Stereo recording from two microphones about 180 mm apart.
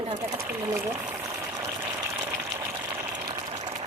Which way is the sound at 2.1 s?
15° right (ahead or behind).